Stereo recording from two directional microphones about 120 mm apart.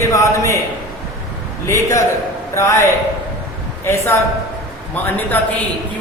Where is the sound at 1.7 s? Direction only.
25° left (ahead or behind).